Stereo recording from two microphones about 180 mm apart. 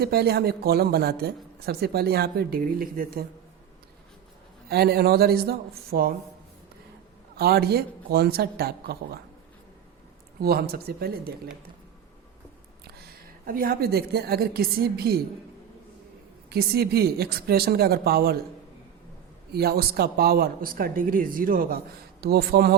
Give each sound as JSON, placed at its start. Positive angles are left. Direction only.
{"t": 0.0, "sound": "speech", "side_deg": -60}
{"t": 4.7, "sound": "speech", "side_deg": -60}
{"t": 7.3, "sound": "speech", "side_deg": -60}
{"t": 10.4, "sound": "speech", "side_deg": -60}
{"t": 13.5, "sound": "speech", "side_deg": -55}
{"t": 16.5, "sound": "speech", "side_deg": -60}
{"t": 19.5, "sound": "speech", "side_deg": -60}